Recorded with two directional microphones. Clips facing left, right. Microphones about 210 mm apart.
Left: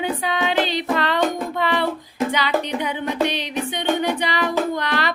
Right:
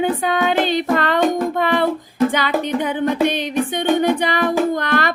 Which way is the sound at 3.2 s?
50° right (ahead or behind).